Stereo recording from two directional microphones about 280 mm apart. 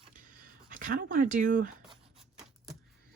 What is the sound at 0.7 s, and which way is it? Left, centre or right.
Speech, right.